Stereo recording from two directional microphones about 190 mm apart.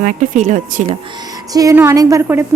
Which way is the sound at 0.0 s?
40° right (ahead or behind).